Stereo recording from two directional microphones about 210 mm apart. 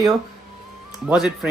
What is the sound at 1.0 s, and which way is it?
Speech, centre (ahead or behind).